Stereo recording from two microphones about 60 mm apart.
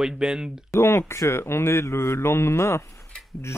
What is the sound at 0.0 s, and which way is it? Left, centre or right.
Speech, centre.